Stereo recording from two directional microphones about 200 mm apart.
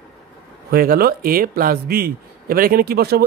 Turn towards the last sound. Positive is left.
turn(degrees=-50)  # may be behind; listen again after turning